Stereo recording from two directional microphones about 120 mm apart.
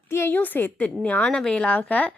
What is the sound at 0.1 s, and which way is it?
A woman's voice, 20° left (ahead or behind).